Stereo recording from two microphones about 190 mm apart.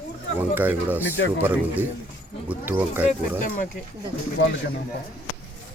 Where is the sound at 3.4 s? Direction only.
45° left (ahead or behind).